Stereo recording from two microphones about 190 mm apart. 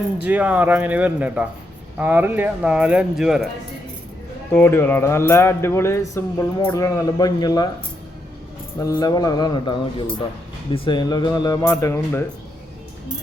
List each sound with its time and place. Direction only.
0.2 s speech: 10° right (ahead or behind)
4.5 s speech: 10° left (ahead or behind)
8.8 s speech: 20° left (ahead or behind)